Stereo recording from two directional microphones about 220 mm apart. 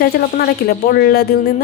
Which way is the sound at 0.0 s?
45° left (ahead or behind).